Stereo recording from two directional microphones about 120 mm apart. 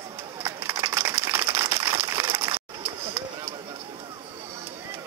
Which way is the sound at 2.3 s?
50° right (ahead or behind).